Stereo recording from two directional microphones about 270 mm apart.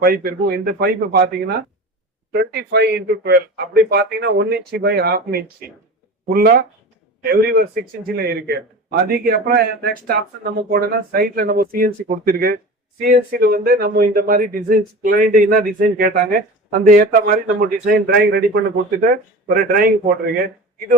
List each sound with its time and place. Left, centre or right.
0.0 s a man's voice: right